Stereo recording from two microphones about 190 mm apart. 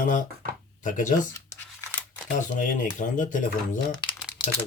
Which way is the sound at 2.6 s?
45° left (ahead or behind).